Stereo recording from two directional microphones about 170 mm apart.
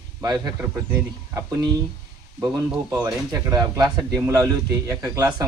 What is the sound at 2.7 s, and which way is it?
Speech, 15° right (ahead or behind).